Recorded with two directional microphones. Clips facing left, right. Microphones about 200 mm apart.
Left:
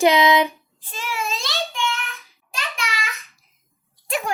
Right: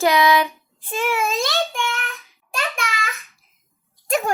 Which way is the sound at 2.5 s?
50° right (ahead or behind).